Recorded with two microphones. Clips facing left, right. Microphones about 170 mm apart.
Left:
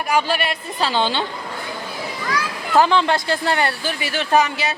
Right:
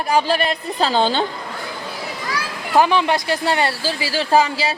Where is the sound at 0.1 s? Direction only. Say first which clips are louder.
Right 2 dB; 35° right (ahead or behind).